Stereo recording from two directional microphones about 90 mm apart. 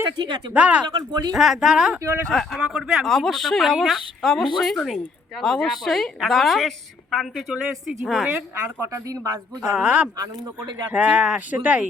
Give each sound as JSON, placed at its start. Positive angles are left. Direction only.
{"t": 0.2, "sound": "speech", "side_deg": -55}
{"t": 0.5, "sound": "speech", "side_deg": -15}
{"t": 0.9, "sound": "speech", "side_deg": -55}
{"t": 1.3, "sound": "a woman's voice", "side_deg": 0}
{"t": 2.6, "sound": "speech", "side_deg": -10}
{"t": 3.0, "sound": "a woman's voice", "side_deg": 5}
{"t": 8.5, "sound": "speech", "side_deg": -30}
{"t": 9.7, "sound": "speech", "side_deg": -15}